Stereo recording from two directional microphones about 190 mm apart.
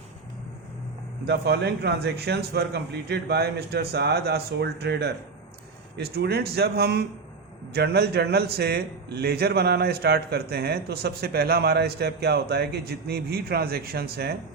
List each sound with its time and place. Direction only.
1.3 s a man's voice: 60° right (ahead or behind)